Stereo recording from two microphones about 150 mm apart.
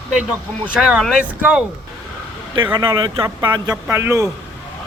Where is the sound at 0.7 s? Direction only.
5° right (ahead or behind).